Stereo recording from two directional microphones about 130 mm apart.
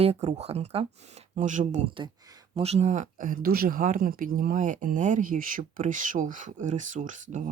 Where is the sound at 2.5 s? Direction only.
55° right (ahead or behind).